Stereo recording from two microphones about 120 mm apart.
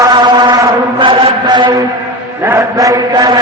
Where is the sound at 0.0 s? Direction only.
35° right (ahead or behind).